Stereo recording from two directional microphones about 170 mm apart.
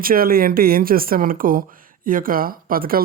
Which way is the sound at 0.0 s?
60° right (ahead or behind).